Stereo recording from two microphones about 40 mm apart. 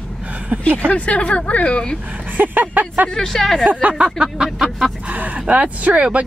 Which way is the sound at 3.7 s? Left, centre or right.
Right.